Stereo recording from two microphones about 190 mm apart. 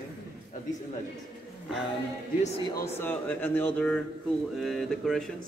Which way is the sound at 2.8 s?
10° left (ahead or behind).